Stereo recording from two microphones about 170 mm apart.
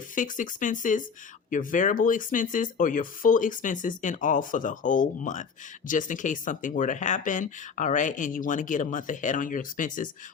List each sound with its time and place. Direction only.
0.2 s speech: 50° left (ahead or behind)